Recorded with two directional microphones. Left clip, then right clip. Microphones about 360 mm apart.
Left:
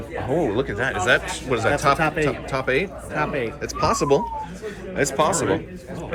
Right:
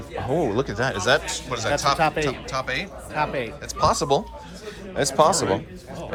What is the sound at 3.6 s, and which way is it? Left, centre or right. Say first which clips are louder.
Speech: right 2 dB; centre.